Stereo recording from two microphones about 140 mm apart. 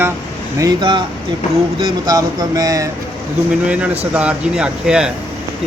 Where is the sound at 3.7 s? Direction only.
10° right (ahead or behind).